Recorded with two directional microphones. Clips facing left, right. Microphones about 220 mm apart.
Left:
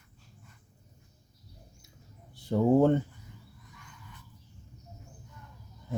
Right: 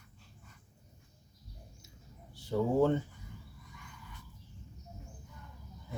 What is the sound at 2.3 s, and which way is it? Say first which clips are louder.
Speech: left 6 dB; 50° left (ahead or behind).